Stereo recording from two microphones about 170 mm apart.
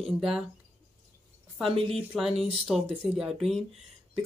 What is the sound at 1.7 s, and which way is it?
Speech, 35° right (ahead or behind).